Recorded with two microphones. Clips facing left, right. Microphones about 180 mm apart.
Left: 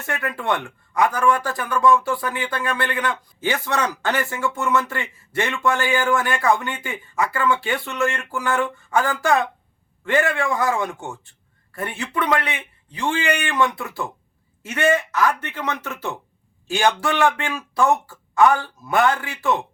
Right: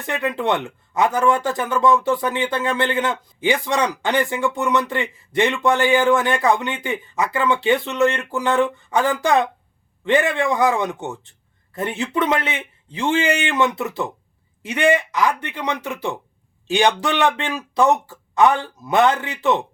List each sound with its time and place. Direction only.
0.0 s speech: 20° right (ahead or behind)